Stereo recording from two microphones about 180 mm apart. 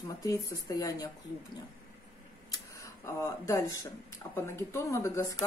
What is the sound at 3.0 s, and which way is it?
A woman's voice, 20° left (ahead or behind).